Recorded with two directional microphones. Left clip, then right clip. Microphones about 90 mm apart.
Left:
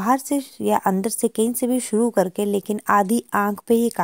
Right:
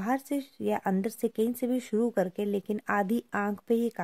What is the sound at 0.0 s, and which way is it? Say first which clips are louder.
Speech: left 10 dB; 50° left (ahead or behind).